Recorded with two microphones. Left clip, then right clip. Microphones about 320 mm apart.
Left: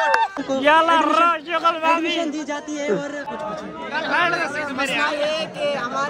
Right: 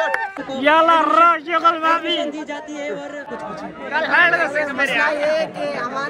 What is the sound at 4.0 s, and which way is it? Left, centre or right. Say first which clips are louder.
Speech: right 5 dB; right.